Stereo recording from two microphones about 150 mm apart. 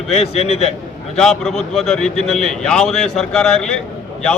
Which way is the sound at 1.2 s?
5° left (ahead or behind).